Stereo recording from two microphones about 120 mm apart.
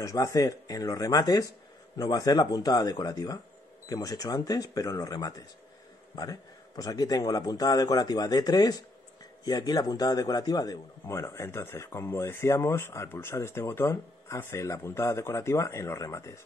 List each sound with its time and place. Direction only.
0.0 s a man's voice: 30° left (ahead or behind)